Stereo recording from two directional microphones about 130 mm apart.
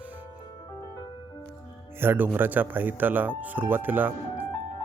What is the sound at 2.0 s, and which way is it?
Speech, 15° right (ahead or behind).